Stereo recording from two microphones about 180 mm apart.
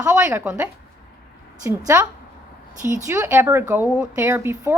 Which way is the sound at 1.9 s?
15° right (ahead or behind).